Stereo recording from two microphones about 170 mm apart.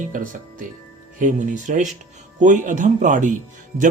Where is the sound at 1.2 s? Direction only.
45° right (ahead or behind).